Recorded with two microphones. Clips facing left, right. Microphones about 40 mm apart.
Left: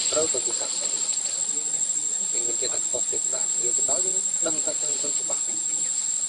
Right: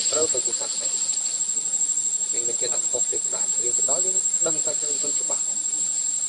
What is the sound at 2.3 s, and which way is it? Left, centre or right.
Speech, centre.